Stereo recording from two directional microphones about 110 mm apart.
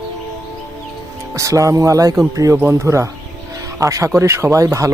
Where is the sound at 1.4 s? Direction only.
30° right (ahead or behind).